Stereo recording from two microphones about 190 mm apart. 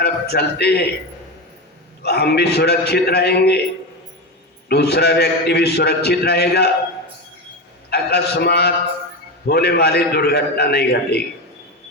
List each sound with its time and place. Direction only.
0.0 s a man's voice: 55° left (ahead or behind)
2.0 s a man's voice: 60° left (ahead or behind)
4.7 s a man's voice: 60° left (ahead or behind)
7.9 s a man's voice: 60° left (ahead or behind)